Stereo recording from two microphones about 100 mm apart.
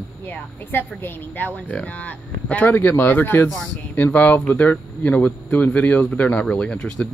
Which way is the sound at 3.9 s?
15° left (ahead or behind).